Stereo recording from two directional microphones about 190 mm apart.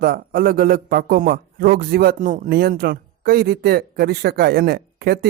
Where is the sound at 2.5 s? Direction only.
55° right (ahead or behind).